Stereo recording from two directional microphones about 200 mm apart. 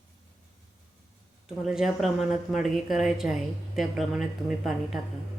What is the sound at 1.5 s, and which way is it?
A woman's voice, centre (ahead or behind).